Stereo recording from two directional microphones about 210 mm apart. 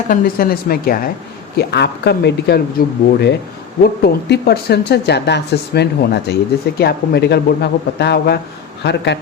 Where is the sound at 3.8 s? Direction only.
50° left (ahead or behind).